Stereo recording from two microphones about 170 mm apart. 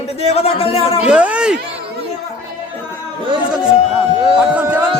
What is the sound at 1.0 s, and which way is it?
Speech, 5° right (ahead or behind).